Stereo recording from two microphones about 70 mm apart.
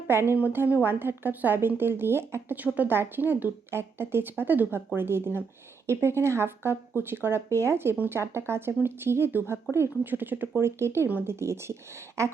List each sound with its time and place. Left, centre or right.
0.3 s a woman's voice: right
10.8 s a woman's voice: right